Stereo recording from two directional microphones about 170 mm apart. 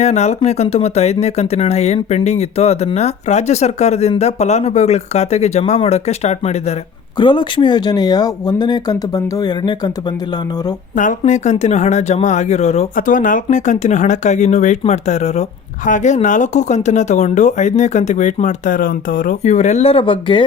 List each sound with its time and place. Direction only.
0.0 s speech: 40° left (ahead or behind)
7.2 s speech: 30° left (ahead or behind)
11.2 s speech: 40° left (ahead or behind)
19.4 s speech: 45° left (ahead or behind)